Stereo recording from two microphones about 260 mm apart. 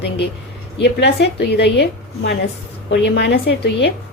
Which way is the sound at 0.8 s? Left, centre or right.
Left.